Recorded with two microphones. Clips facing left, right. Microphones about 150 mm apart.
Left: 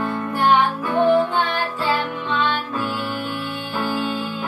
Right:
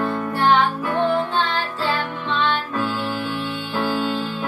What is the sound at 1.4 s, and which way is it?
Music, 15° left (ahead or behind).